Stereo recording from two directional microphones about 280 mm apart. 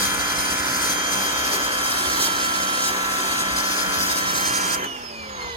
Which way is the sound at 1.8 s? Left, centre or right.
Centre.